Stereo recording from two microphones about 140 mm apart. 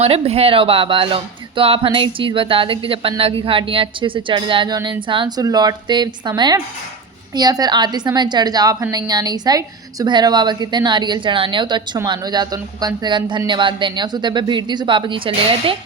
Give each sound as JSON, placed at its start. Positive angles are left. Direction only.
{"t": 0.0, "sound": "speech", "side_deg": -45}